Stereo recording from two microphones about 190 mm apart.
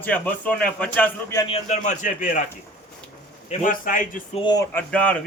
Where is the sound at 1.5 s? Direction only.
35° left (ahead or behind).